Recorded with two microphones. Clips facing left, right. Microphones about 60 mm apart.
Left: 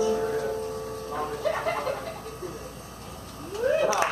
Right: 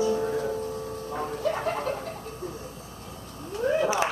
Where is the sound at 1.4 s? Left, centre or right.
Left.